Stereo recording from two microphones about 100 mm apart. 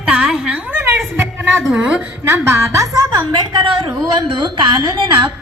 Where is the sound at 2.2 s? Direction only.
25° right (ahead or behind); by 4.8 s 45° right (ahead or behind).